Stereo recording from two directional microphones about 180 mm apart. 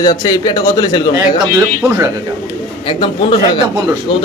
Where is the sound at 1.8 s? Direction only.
10° right (ahead or behind).